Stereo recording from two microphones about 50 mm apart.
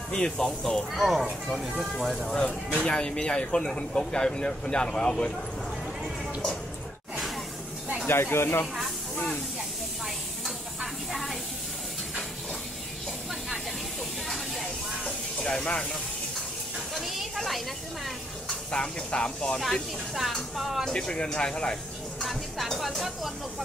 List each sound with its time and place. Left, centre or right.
0.1 s speech: centre
0.9 s speech: centre
2.8 s speech: centre
8.1 s speech: left
11.1 s a sound: centre
14.3 s a sound: centre
15.4 s speech: centre
16.9 s a sound: centre
19.0 s speech: centre
19.6 s speech: centre
20.9 s speech: centre
22.2 s music: centre